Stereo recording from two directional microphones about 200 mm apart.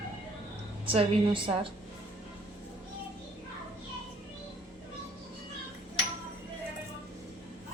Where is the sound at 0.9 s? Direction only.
25° right (ahead or behind).